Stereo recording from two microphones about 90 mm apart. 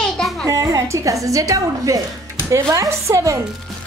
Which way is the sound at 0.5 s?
35° right (ahead or behind).